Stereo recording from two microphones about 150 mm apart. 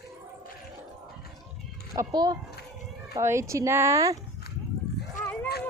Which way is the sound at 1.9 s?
25° right (ahead or behind).